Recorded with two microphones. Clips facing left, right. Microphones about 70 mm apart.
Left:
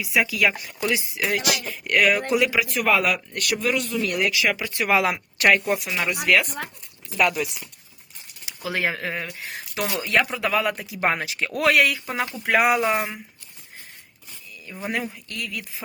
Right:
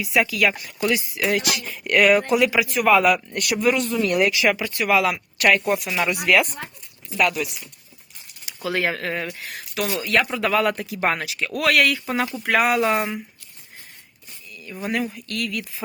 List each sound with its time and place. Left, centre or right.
0.0 s speech: centre
1.2 s speech: centre
3.3 s speech: centre
3.8 s speech: right
4.4 s speech: centre
4.7 s speech: left
5.6 s speech: centre
7.2 s speech: centre
8.4 s speech: centre
9.7 s speech: left
10.2 s speech: centre
11.3 s speech: left
11.7 s speech: centre
14.8 s speech: centre